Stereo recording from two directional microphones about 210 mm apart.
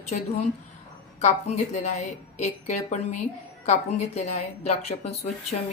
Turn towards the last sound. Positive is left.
turn(degrees=30)  # may be behind; listen again after turning